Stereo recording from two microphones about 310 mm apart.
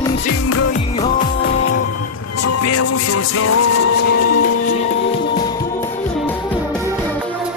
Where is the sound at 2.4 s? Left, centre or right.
Left.